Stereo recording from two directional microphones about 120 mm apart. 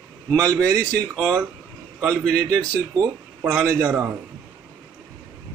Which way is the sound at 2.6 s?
25° right (ahead or behind).